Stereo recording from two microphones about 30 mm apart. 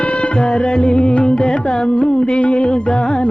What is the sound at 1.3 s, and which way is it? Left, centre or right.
Carnatic music, left.